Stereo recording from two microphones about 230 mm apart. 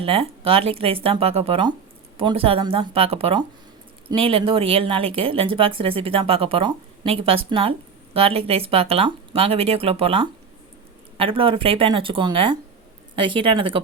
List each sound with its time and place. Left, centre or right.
0.0 s speech: right